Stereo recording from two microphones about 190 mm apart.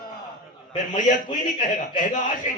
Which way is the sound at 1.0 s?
40° left (ahead or behind).